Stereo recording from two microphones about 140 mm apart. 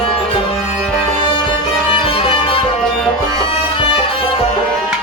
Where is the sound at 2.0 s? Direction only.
40° left (ahead or behind).